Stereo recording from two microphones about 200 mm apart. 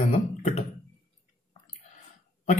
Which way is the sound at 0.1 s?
40° left (ahead or behind).